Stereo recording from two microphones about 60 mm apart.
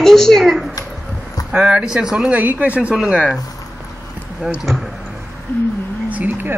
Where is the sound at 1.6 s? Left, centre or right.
Centre.